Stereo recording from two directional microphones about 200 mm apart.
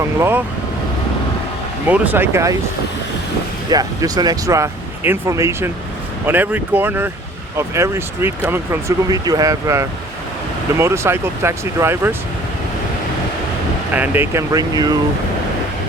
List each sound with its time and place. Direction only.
0.0 s speech: 10° right (ahead or behind)
1.9 s speech: 10° right (ahead or behind)
3.7 s speech: 20° right (ahead or behind)
13.9 s speech: 10° right (ahead or behind)